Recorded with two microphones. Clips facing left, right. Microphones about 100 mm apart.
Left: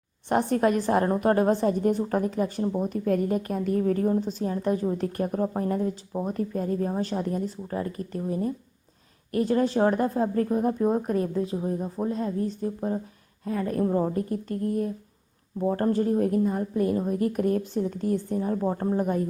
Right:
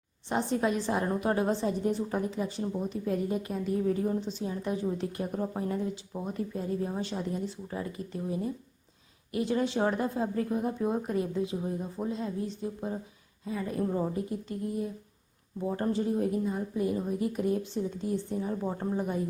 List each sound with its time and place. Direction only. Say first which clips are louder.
0.3 s a woman's voice: left 6 dB; 55° left (ahead or behind)
13.4 s speech: left 5 dB; 55° left (ahead or behind)
13.8 s a woman's voice: left 5 dB; 45° left (ahead or behind)
18.9 s a woman's voice: left 6 dB; 50° left (ahead or behind)